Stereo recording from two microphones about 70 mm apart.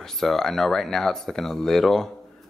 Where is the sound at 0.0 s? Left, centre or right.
Centre.